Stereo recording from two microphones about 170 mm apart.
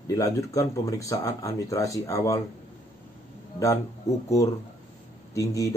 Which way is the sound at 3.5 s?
20° left (ahead or behind).